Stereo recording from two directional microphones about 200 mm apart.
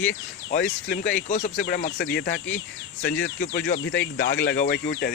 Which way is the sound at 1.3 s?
50° left (ahead or behind).